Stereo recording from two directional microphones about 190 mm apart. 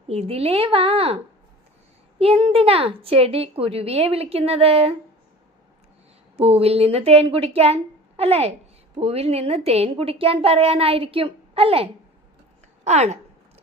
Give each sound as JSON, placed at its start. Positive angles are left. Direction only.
{"t": 0.1, "sound": "speech", "side_deg": -30}
{"t": 6.3, "sound": "speech", "side_deg": -30}